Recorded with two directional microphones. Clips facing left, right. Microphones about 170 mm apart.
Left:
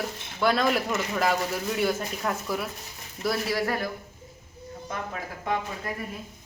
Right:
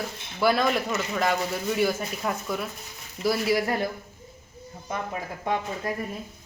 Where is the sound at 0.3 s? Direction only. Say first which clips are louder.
Right 1 dB; 5° right (ahead or behind).